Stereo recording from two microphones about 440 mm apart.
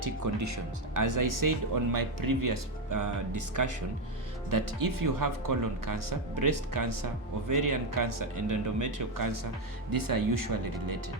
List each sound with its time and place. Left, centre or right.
0.0 s speech: right